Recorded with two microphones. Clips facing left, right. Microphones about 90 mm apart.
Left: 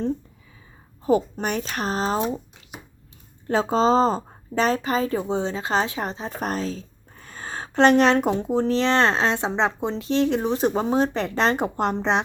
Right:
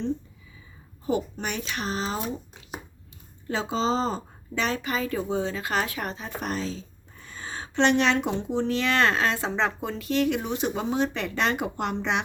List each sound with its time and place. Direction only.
1.0 s speech: 40° left (ahead or behind)
3.4 s speech: 45° left (ahead or behind)